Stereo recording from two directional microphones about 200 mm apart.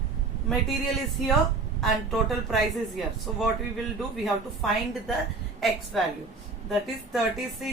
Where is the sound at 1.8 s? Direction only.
Centre (ahead or behind).